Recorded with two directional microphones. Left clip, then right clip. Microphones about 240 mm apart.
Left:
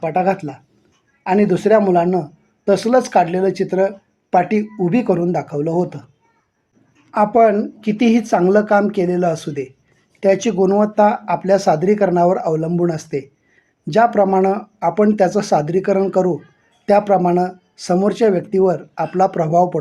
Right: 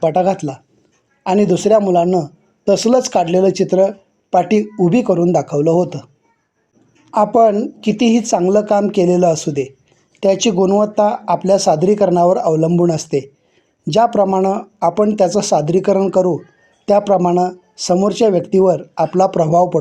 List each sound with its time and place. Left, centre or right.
0.0 s speech: right
7.3 s speech: centre